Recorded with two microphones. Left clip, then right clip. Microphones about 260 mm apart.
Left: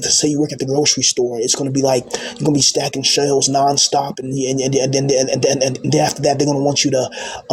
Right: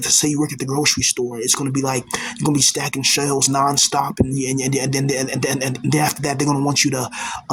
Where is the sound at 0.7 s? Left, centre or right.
Right.